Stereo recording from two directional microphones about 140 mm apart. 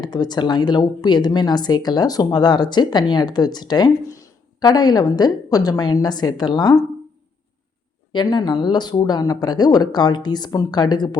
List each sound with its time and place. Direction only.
0.0 s a woman's voice: 30° left (ahead or behind)
8.1 s a woman's voice: 30° left (ahead or behind)